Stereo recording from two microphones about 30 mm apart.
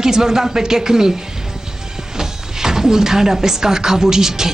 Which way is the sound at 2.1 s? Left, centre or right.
Centre.